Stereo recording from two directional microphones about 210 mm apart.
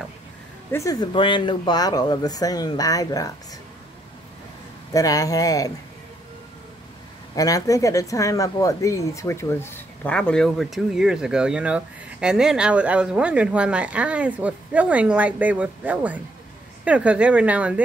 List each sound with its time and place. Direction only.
0.7 s speech: 15° left (ahead or behind)
4.9 s speech: 15° left (ahead or behind)
7.3 s speech: 15° left (ahead or behind); by 17.8 s 5° right (ahead or behind)